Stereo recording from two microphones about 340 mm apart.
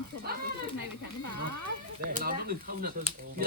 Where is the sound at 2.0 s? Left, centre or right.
Right.